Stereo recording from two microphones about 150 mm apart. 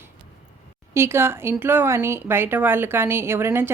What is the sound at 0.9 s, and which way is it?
A woman's voice, 15° right (ahead or behind).